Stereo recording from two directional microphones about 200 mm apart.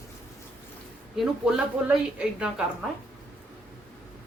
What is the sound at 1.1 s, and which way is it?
A woman's voice, 5° right (ahead or behind).